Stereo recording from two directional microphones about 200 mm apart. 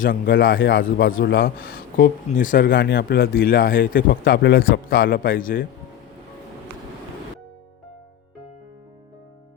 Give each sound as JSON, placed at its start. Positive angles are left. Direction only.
{"t": 0.0, "sound": "speech", "side_deg": 45}